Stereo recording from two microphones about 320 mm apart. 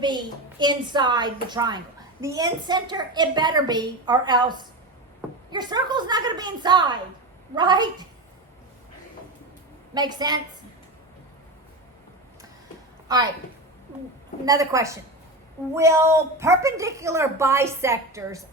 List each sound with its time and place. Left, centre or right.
0.0 s a woman's voice: centre
9.9 s a woman's voice: centre
14.4 s a woman's voice: centre